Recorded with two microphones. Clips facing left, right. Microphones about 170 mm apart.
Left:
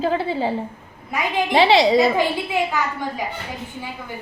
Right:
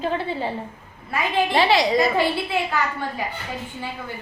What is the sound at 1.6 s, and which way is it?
Speech, 30° left (ahead or behind).